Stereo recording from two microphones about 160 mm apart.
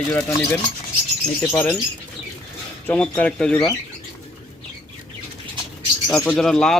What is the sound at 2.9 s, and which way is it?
Speech, 10° left (ahead or behind).